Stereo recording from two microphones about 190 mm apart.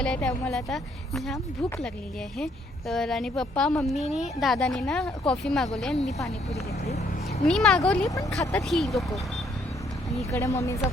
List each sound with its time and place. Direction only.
0.0 s speech: 5° left (ahead or behind)
2.4 s speech: centre (ahead or behind)
6.8 s speech: 35° left (ahead or behind)
7.4 s speech: 5° left (ahead or behind)
10.2 s speech: 15° left (ahead or behind)